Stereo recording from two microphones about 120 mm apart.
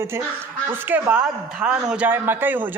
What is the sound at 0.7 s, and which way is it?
A woman's voice, 15° right (ahead or behind).